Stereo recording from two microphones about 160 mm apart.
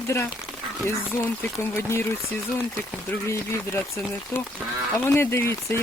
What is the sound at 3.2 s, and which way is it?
Speech, 15° left (ahead or behind).